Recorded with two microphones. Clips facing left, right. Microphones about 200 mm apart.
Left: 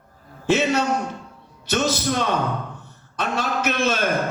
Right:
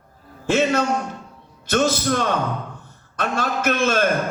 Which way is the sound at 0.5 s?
50° right (ahead or behind).